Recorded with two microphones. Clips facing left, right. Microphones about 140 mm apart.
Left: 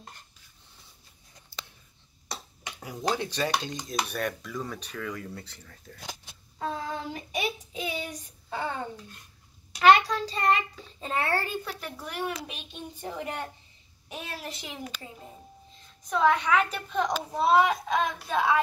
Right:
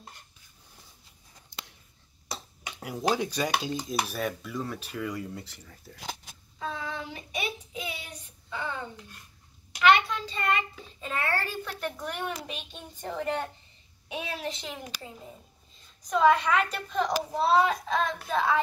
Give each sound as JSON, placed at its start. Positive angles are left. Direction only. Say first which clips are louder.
{"t": 2.8, "sound": "dishes", "louder": "right 2 dB", "side_deg": -10}
{"t": 6.6, "sound": "a sound", "louder": "left 2 dB", "side_deg": 45}
{"t": 8.0, "sound": "child singing", "louder": "left 8 dB", "side_deg": 40}
{"t": 11.0, "sound": "a child's voice", "louder": "left 2 dB", "side_deg": 30}
{"t": 11.6, "sound": "a woman's voice", "louder": "right 3 dB", "side_deg": 5}
{"t": 16.1, "sound": "a woman's voice", "louder": "right 1 dB", "side_deg": 0}